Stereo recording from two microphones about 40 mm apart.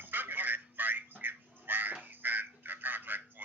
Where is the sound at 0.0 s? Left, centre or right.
Right.